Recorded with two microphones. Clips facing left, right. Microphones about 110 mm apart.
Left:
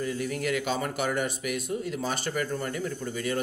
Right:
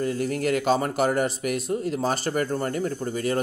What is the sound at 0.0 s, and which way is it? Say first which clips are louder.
Speech: right 5 dB; 45° right (ahead or behind).